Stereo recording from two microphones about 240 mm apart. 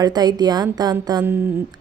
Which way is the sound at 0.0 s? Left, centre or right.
Centre.